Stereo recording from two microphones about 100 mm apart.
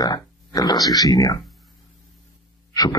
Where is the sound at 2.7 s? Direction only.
40° left (ahead or behind).